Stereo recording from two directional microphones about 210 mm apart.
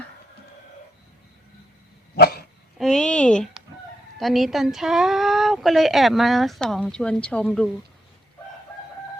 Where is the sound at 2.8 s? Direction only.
Centre (ahead or behind).